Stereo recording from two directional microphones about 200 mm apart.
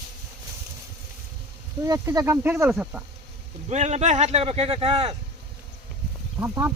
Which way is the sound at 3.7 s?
35° right (ahead or behind).